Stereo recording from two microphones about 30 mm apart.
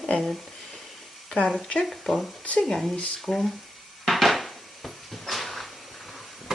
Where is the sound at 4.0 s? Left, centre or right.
Centre.